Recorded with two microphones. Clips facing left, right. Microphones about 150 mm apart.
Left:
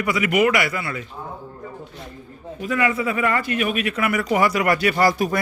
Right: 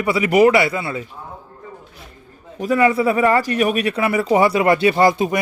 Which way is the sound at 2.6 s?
35° right (ahead or behind).